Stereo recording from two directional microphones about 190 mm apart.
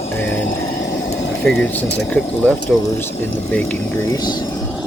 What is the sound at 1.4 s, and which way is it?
Speech, 5° left (ahead or behind).